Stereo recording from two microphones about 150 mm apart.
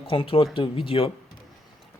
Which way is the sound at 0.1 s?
35° left (ahead or behind).